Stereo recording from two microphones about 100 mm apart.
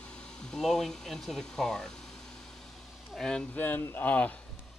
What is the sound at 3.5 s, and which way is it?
Speech, 20° left (ahead or behind).